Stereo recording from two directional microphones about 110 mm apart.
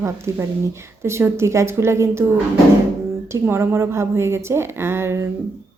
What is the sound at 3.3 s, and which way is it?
A woman's voice, 25° right (ahead or behind).